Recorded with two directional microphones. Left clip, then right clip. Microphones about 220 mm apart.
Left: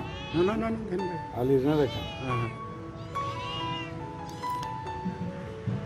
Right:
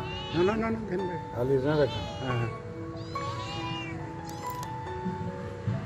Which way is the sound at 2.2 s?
Centre (ahead or behind).